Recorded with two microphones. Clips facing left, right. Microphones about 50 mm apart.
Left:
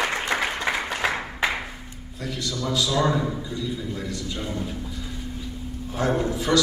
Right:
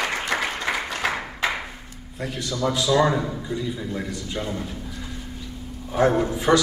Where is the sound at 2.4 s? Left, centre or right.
Right.